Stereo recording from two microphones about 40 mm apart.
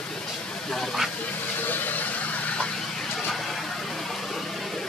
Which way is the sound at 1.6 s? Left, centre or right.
Left.